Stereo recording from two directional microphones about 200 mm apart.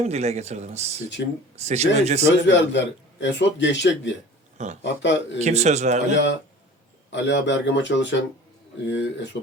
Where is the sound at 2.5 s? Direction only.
65° left (ahead or behind).